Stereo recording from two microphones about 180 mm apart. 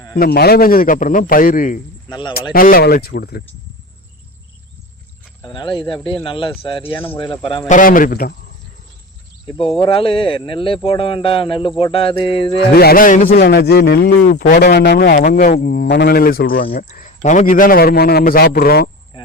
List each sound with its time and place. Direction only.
0.2 s a man's voice: 60° left (ahead or behind)
5.5 s speech: 25° left (ahead or behind)
7.7 s a man's voice: 50° left (ahead or behind)
9.5 s speech: 30° left (ahead or behind)
12.5 s speech: 60° left (ahead or behind)
13.4 s speech: 65° left (ahead or behind)